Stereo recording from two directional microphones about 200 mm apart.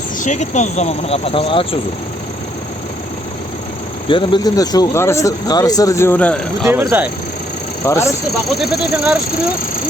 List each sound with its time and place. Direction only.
0.2 s speech: 35° left (ahead or behind)
4.1 s speech: 20° left (ahead or behind); by 6.7 s 5° left (ahead or behind)
7.9 s speech: 15° left (ahead or behind)
8.4 s speech: centre (ahead or behind)